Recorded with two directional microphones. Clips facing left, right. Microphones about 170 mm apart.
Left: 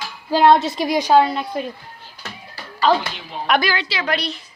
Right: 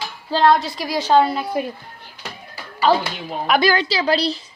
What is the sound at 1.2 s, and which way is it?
Speech, 5° right (ahead or behind).